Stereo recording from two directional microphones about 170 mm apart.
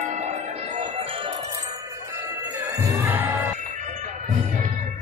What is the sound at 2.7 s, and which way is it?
Music, 15° right (ahead or behind).